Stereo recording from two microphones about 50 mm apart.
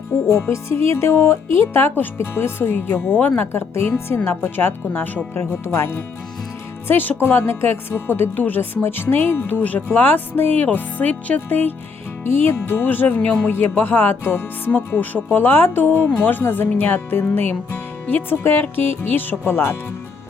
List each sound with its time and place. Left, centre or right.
0.3 s speech: left
3.2 s speech: left
3.4 s speech: left
6.8 s speech: left